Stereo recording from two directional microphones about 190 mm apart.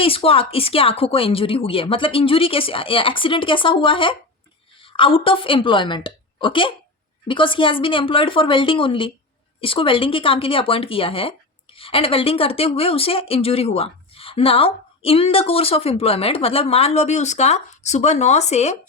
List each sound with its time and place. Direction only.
0.0 s a woman's voice: 30° left (ahead or behind)